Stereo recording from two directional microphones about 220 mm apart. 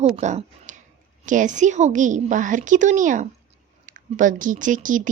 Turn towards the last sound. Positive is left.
turn(degrees=-35)  # may be behind; listen again after turning